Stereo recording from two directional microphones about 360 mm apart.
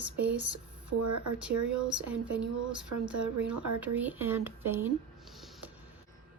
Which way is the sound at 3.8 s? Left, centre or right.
Centre.